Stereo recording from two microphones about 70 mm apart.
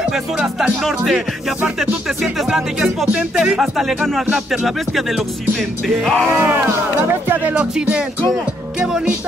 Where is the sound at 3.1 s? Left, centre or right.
Centre.